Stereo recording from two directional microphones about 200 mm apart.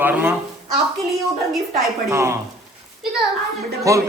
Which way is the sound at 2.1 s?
15° right (ahead or behind).